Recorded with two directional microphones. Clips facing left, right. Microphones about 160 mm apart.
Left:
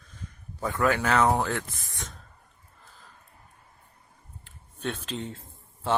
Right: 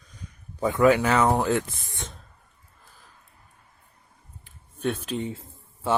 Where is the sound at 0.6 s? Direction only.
20° right (ahead or behind).